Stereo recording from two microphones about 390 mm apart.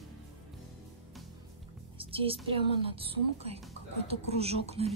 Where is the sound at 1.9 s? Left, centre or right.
Centre.